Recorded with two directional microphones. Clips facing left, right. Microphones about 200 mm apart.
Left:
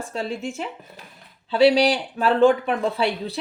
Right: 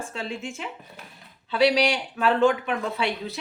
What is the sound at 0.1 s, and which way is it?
Speech, 35° left (ahead or behind).